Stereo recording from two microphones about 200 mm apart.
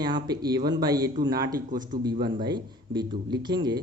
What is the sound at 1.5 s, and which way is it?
Speech, 40° right (ahead or behind).